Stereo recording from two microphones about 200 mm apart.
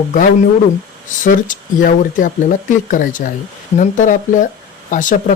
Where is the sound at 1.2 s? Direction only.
40° left (ahead or behind).